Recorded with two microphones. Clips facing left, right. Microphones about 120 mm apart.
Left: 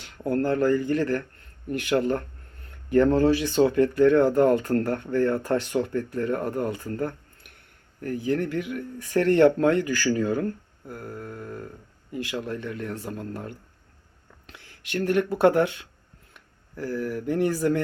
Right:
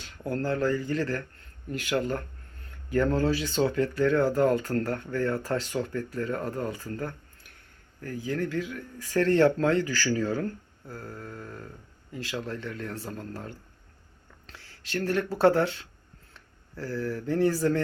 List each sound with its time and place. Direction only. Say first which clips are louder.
0.4 s speech: left 4 dB; 20° left (ahead or behind)
8.5 s speech: left 3 dB; 20° left (ahead or behind)